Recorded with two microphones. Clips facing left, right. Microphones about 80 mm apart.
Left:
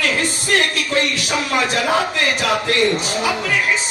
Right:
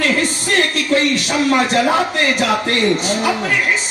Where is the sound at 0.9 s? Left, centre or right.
Right.